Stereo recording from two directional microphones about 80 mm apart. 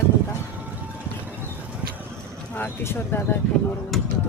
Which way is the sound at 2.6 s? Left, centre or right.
Left.